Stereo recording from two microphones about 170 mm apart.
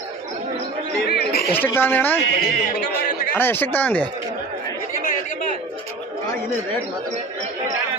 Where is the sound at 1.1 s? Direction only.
65° left (ahead or behind).